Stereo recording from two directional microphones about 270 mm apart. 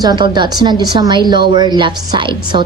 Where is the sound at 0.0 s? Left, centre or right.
Centre.